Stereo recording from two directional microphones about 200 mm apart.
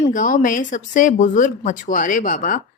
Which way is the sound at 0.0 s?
40° left (ahead or behind).